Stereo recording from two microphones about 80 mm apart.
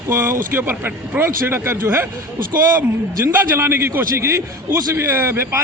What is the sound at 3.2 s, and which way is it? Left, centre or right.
A man's voice, right.